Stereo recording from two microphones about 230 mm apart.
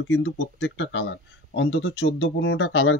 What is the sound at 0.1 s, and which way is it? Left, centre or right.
Speech, left.